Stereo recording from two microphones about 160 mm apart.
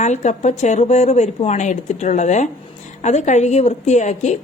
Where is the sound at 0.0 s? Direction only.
50° left (ahead or behind).